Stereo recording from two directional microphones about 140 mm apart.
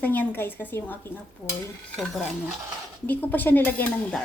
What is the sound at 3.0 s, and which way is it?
A woman's voice, 10° left (ahead or behind).